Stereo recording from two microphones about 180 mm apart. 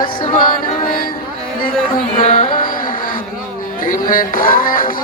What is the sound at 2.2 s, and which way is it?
Music, 40° left (ahead or behind).